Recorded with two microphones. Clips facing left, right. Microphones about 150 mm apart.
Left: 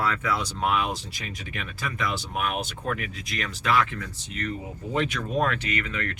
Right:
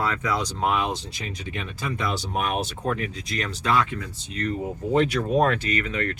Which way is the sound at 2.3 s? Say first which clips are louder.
Right 4 dB; 40° right (ahead or behind).